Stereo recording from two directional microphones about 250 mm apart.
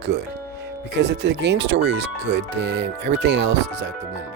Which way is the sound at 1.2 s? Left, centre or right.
Right.